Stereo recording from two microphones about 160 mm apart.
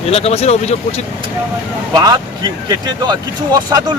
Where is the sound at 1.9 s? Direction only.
25° right (ahead or behind).